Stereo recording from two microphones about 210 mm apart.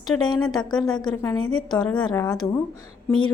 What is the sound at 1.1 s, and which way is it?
Speech, 15° left (ahead or behind).